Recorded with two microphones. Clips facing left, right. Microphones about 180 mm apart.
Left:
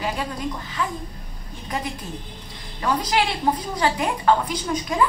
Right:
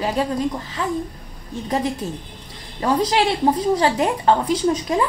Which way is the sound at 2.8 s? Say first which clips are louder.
Right 4 dB; 30° right (ahead or behind).